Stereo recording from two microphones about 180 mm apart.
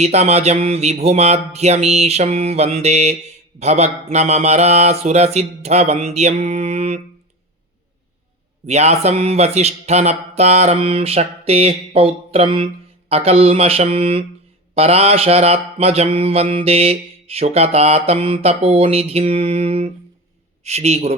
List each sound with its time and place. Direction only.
0.0 s speech: 35° right (ahead or behind)
8.6 s speech: 35° right (ahead or behind)